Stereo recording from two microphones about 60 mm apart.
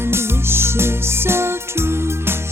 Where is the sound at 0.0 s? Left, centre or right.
Right.